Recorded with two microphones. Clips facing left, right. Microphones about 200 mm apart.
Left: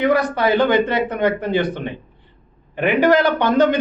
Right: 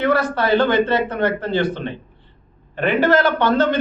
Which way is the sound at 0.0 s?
15° left (ahead or behind).